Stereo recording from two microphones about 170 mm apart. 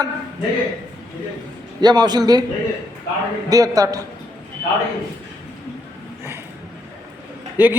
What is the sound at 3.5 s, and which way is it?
Speech, 20° right (ahead or behind).